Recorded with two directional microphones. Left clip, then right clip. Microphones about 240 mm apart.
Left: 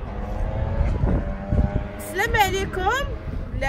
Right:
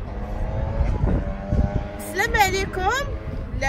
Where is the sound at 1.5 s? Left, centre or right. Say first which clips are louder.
Even; right.